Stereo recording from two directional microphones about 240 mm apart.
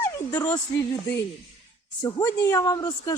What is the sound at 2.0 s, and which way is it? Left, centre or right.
A woman's voice, centre.